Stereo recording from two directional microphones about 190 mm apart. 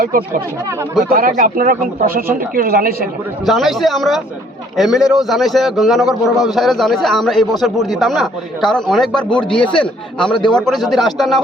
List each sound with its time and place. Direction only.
0.0 s speech: 50° right (ahead or behind)
3.4 s a man's voice: centre (ahead or behind)